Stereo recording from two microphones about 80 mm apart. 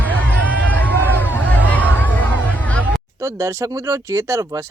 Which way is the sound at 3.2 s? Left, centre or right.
Right.